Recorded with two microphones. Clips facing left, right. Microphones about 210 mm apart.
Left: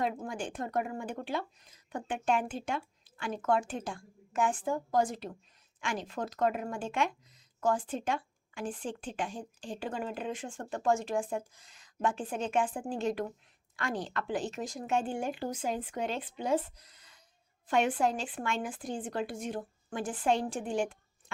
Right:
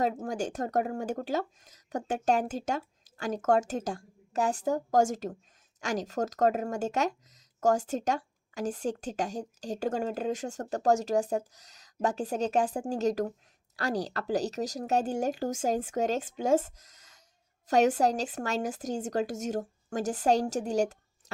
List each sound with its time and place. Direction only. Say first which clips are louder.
0.0 s speech: right 4 dB; 40° right (ahead or behind)